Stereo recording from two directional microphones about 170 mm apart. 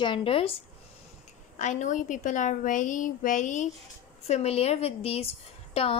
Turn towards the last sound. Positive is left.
turn(degrees=35)  # may be behind; listen again after turning